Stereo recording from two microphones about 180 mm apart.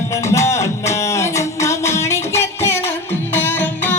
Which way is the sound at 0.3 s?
15° left (ahead or behind).